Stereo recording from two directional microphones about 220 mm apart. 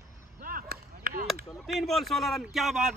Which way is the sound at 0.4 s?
40° right (ahead or behind).